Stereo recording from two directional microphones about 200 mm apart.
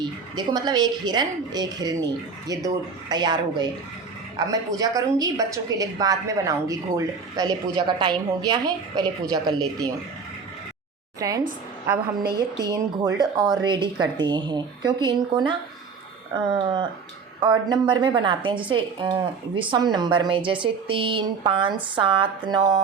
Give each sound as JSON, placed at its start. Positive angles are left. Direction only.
{"t": 0.3, "sound": "a woman's voice", "side_deg": -20}
{"t": 4.7, "sound": "a woman's voice", "side_deg": -20}
{"t": 11.2, "sound": "a woman's voice", "side_deg": -15}